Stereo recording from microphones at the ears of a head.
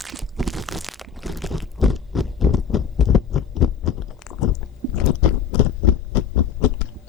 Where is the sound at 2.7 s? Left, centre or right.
Left.